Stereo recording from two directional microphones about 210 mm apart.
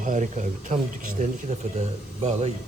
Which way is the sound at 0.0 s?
35° right (ahead or behind).